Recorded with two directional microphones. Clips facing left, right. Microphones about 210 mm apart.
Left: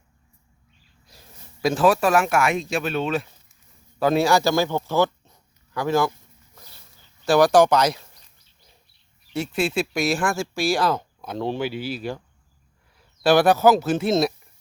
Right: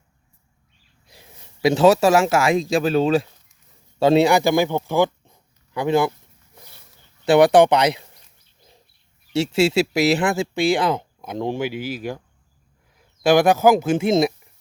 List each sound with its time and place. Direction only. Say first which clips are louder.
1.7 s speech: right 4 dB; 25° right (ahead or behind)
4.0 s speech: right 4 dB; 25° right (ahead or behind)
7.3 s speech: right 3 dB; 20° right (ahead or behind)
9.3 s speech: right 6 dB; 80° right
10.2 s speech: right 4 dB; 20° right (ahead or behind)
13.2 s speech: right 1 dB; 10° right (ahead or behind)